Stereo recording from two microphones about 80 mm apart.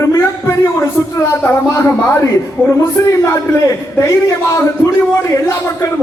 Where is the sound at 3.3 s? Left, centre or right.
Left.